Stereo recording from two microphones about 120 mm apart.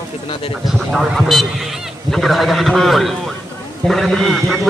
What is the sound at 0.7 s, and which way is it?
A man's voice, centre (ahead or behind).